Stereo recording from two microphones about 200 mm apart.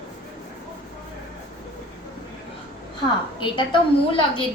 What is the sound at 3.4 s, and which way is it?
Speech, 25° left (ahead or behind).